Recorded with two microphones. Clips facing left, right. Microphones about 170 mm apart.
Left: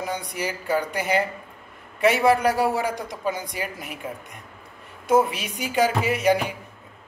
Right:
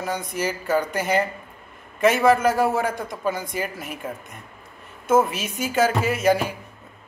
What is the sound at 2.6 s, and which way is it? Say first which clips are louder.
Speech: right 2 dB; 50° right (ahead or behind).